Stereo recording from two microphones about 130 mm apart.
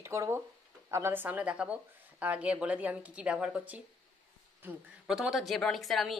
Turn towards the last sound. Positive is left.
turn(degrees=0)  # may be behind; listen again after turning